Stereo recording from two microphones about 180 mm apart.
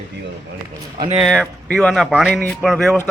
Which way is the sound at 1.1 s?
5° left (ahead or behind).